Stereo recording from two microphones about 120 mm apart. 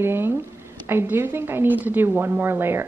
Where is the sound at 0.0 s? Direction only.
20° right (ahead or behind).